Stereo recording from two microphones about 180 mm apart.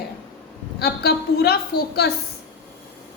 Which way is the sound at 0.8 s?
60° left (ahead or behind).